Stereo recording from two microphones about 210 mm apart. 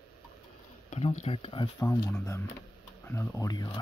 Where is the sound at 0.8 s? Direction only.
30° left (ahead or behind).